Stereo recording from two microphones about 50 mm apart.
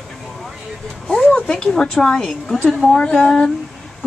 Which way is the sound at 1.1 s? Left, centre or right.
Centre.